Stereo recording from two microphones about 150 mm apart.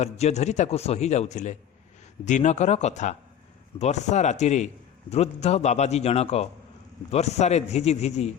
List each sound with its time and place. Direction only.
0.0 s a man's voice: 45° left (ahead or behind)